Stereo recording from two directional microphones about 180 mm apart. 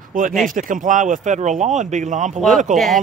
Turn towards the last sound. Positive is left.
turn(degrees=0)  # may be behind; listen again after turning